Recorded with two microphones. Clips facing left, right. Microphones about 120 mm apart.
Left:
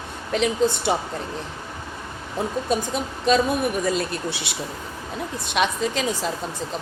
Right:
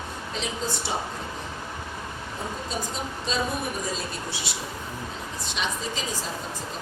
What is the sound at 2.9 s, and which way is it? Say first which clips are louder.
Speech: left 9 dB; 65° left (ahead or behind).